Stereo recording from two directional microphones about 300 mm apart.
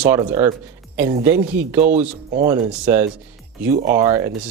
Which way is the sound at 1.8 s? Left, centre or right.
Right.